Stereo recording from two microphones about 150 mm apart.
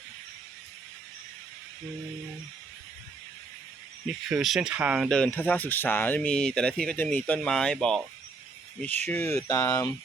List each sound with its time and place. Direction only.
4.0 s speech: centre (ahead or behind)
5.0 s speech: 5° left (ahead or behind)